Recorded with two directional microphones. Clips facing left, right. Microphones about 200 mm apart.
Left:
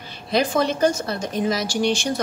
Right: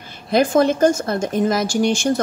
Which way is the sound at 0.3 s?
50° right (ahead or behind).